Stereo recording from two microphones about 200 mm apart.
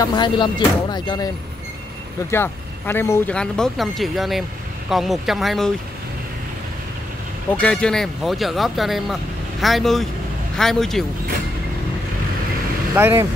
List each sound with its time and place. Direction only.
0.0 s speech: 20° left (ahead or behind)
2.3 s speech: 10° left (ahead or behind)
7.5 s speech: 5° left (ahead or behind)
12.9 s speech: 10° right (ahead or behind)